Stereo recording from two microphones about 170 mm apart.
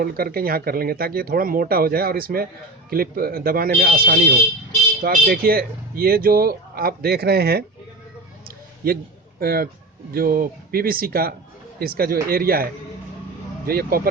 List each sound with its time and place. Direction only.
0.0 s speech: 60° right (ahead or behind)
8.4 s a sound: 60° right (ahead or behind)
9.4 s speech: 60° right (ahead or behind)